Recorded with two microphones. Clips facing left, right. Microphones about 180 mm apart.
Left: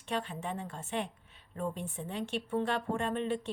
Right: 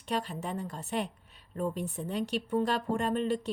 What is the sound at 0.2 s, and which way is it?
A woman's voice, 40° right (ahead or behind).